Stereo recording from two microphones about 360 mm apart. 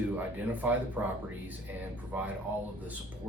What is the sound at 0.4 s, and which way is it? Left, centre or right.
Speech, centre.